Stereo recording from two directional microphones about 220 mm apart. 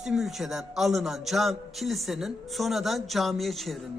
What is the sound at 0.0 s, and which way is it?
A man's voice, centre (ahead or behind).